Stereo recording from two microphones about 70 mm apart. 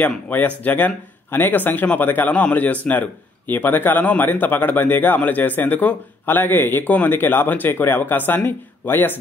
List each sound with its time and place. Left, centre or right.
0.7 s a man's voice: left